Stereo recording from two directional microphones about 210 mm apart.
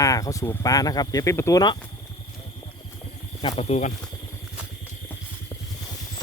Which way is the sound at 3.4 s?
25° left (ahead or behind).